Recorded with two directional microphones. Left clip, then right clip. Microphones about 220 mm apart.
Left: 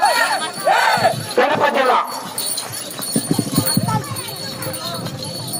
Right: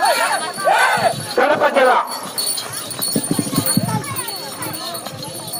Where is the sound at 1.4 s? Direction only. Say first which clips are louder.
Right 2 dB; 45° left (ahead or behind).